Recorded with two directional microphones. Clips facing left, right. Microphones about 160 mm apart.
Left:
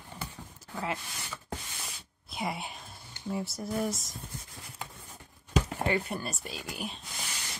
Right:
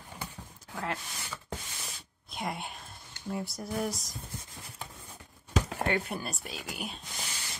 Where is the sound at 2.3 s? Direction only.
5° left (ahead or behind).